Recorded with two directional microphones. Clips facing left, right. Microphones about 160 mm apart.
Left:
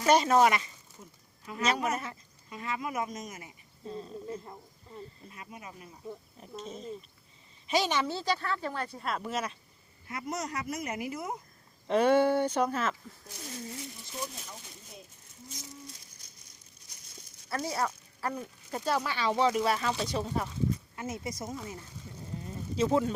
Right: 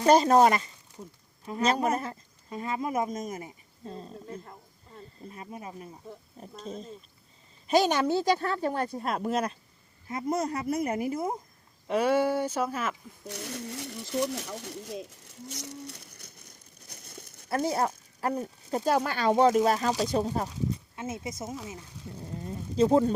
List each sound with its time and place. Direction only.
0.0 s speech: 35° right (ahead or behind)
3.2 s cricket: 35° right (ahead or behind)
5.3 s speech: 35° right (ahead or behind)
7.7 s speech: 45° right (ahead or behind)
10.1 s speech: 25° right (ahead or behind)
11.9 s speech: 10° right (ahead or behind)
13.2 s speech: 70° right (ahead or behind); by 20.5 s 35° right (ahead or behind)
20.9 s speech: 25° right (ahead or behind)
22.4 s speech: 35° right (ahead or behind)